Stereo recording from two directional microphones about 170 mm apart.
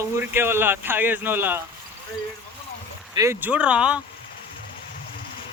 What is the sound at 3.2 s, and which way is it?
Speech, 15° right (ahead or behind).